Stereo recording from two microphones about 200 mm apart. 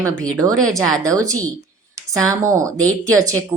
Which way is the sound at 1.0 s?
15° right (ahead or behind).